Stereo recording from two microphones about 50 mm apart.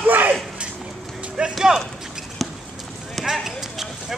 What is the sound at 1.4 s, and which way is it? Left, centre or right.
Clip-clop, centre.